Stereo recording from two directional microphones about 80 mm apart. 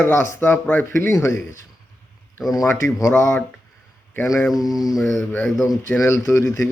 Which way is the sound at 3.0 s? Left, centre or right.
Left.